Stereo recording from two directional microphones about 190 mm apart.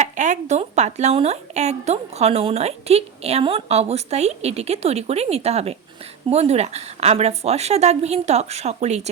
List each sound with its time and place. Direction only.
0.0 s speech: 40° right (ahead or behind)